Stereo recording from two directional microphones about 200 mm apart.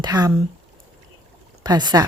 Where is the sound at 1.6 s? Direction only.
20° right (ahead or behind).